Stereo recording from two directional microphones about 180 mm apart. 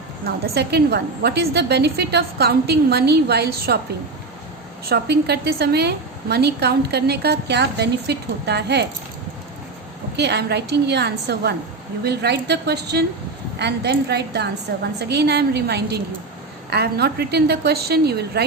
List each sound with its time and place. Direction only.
0.3 s a woman's voice: 60° right (ahead or behind)
4.9 s a woman's voice: 65° right (ahead or behind)
10.2 s a woman's voice: 70° right (ahead or behind)